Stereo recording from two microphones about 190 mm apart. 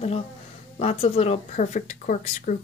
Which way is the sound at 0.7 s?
35° left (ahead or behind).